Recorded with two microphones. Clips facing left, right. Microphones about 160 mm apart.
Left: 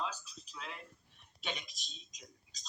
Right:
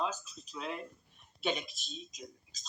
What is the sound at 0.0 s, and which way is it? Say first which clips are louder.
A woman's voice: right 5 dB; 40° right (ahead or behind).